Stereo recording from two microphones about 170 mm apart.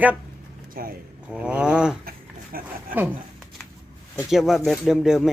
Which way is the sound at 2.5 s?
55° right (ahead or behind).